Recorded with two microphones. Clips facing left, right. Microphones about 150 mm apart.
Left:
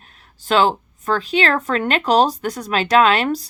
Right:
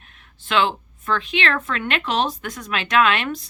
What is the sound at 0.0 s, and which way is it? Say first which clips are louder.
Speech: left 2 dB; 35° left (ahead or behind).